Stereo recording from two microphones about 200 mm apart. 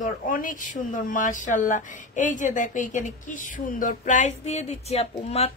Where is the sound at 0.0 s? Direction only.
40° left (ahead or behind).